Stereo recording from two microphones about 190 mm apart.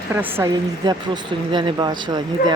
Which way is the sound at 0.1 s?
10° right (ahead or behind).